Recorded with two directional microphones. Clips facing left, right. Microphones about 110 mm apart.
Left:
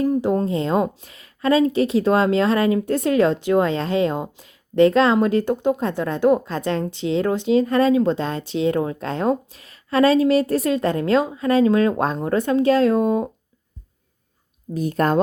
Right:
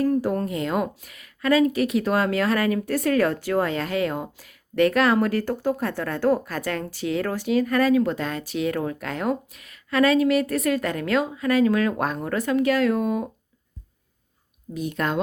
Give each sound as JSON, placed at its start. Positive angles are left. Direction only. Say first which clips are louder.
{"t": 0.0, "sound": "a woman's voice", "louder": "left 3 dB", "side_deg": 20}
{"t": 14.7, "sound": "speech", "louder": "left 6 dB", "side_deg": 40}